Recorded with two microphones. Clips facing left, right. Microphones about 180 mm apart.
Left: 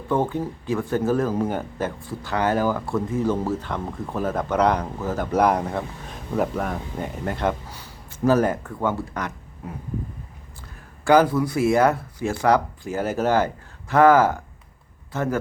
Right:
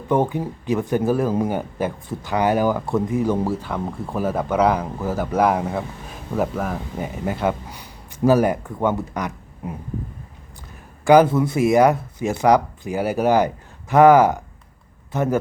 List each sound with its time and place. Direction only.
0.1 s speech: 15° right (ahead or behind)
11.0 s speech: 15° right (ahead or behind)